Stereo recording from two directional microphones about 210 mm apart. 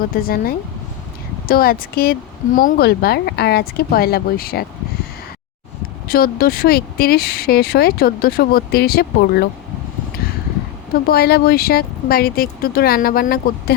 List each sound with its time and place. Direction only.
0.1 s speech: 45° left (ahead or behind)
6.1 s speech: 45° left (ahead or behind)
11.0 s speech: 50° left (ahead or behind)